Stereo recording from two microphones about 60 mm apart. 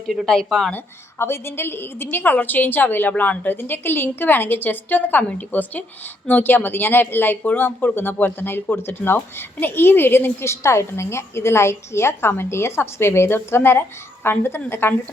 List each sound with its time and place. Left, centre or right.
0.3 s a woman's voice: centre
1.2 s speech: left